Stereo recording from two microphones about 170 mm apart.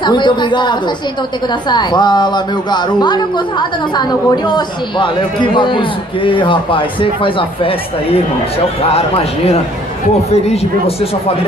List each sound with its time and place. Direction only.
0.0 s a man's voice: 25° left (ahead or behind)